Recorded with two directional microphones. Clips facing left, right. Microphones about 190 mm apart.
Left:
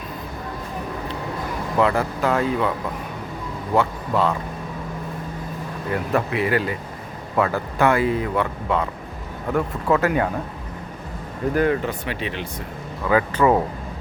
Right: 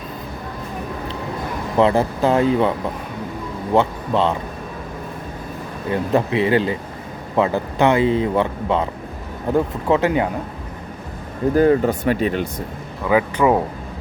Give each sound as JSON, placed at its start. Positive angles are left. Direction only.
{"t": 1.8, "sound": "speech", "side_deg": -25}
{"t": 3.8, "sound": "speech", "side_deg": -25}
{"t": 5.9, "sound": "speech", "side_deg": -25}
{"t": 11.5, "sound": "speech", "side_deg": -35}
{"t": 13.1, "sound": "speech", "side_deg": -15}